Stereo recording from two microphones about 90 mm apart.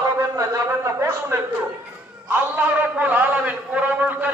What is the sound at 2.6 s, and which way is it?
A man's voice, 20° right (ahead or behind).